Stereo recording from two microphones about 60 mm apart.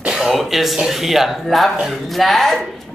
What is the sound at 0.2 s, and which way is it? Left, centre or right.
Speech, centre.